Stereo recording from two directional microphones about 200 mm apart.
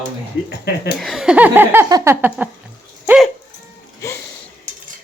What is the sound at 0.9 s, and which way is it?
Speech, centre (ahead or behind).